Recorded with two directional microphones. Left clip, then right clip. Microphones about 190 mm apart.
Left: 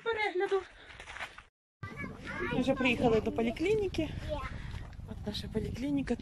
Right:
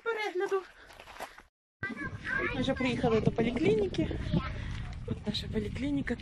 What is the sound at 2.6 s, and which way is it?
A woman's voice, 10° left (ahead or behind).